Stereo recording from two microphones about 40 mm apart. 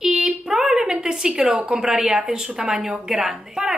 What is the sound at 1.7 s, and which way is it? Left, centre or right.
A woman's voice, centre.